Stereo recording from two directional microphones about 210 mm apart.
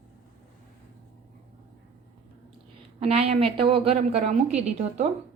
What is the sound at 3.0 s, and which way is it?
A woman's voice, 30° right (ahead or behind).